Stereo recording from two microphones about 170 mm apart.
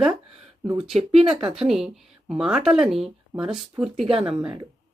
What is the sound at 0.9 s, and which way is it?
Speech, 35° right (ahead or behind).